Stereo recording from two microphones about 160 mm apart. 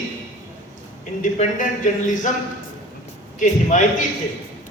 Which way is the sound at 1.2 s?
50° left (ahead or behind).